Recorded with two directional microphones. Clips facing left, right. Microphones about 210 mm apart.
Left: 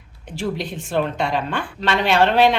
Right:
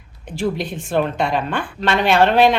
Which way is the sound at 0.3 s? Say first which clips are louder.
Right 3 dB; 50° right (ahead or behind).